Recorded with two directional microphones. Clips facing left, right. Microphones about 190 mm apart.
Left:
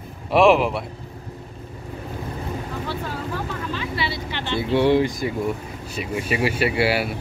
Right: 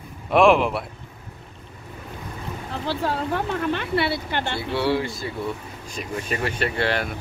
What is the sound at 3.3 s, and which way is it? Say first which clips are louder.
Speech: right 4 dB; 60° right (ahead or behind).